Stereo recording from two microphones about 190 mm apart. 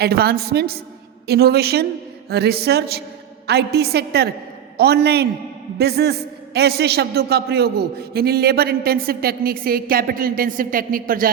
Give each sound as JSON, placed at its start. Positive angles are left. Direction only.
{"t": 0.0, "sound": "a woman's voice", "side_deg": -55}